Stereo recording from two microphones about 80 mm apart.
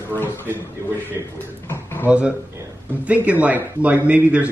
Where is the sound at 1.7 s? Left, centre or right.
Left.